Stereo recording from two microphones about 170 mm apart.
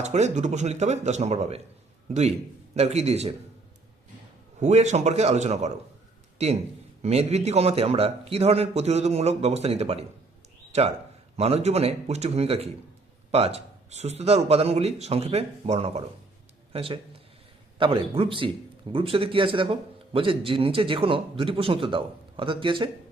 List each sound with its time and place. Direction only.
0.0 s speech: 40° right (ahead or behind)
2.7 s speech: 40° right (ahead or behind)
4.6 s speech: 40° right (ahead or behind)